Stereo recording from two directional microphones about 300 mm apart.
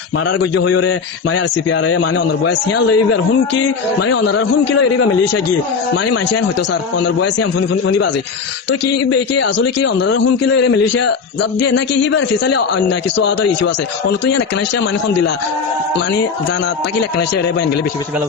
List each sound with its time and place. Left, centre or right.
0.3 s a man's voice: left
7.7 s a man's voice: left
9.4 s a man's voice: left